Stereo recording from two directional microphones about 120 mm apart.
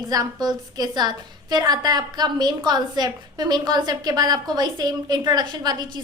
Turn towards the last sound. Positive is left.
turn(degrees=-35)  # may be behind; listen again after turning